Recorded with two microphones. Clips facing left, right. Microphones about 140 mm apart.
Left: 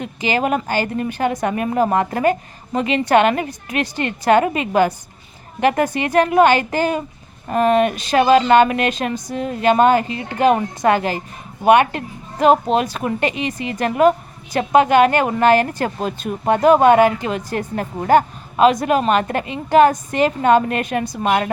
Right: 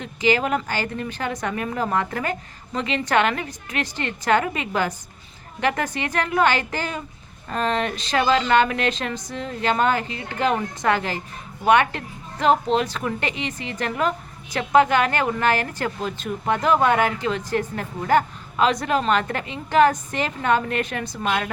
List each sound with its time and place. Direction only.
0.4 s speech: 15° left (ahead or behind)
2.7 s a woman's voice: 15° left (ahead or behind)